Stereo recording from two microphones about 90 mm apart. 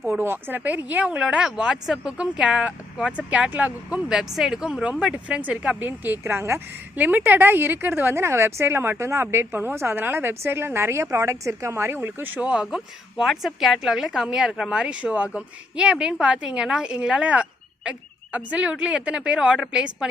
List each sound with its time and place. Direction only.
0.2 s speech: 25° right (ahead or behind); by 20.1 s 5° right (ahead or behind)